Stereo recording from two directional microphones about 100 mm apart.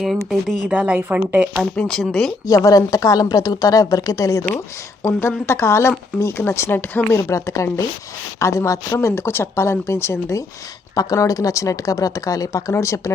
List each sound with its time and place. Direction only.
0.0 s speech: centre (ahead or behind)
0.7 s speech: 15° right (ahead or behind)
1.9 s speech: centre (ahead or behind)
2.5 s speech: 35° left (ahead or behind)